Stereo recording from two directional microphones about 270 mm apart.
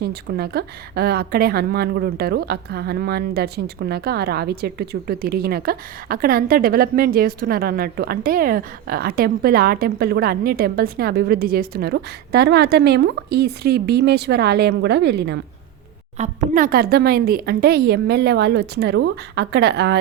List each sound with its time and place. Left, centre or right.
0.0 s a woman's voice: right
16.1 s a woman's voice: right